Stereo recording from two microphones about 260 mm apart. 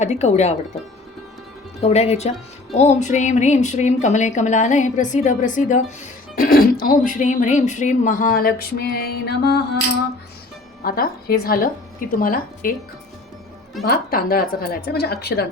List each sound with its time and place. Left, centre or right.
0.0 s a woman's voice: left
1.8 s a woman's voice: left
10.8 s a woman's voice: left
13.8 s a woman's voice: left